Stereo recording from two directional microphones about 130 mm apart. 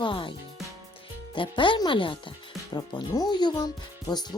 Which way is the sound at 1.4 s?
40° left (ahead or behind).